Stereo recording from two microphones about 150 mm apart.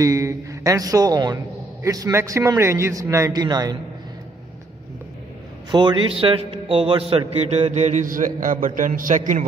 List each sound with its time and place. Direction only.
0.0 s a man's voice: 20° right (ahead or behind)
5.7 s a man's voice: 30° right (ahead or behind); by 9.4 s 60° right (ahead or behind)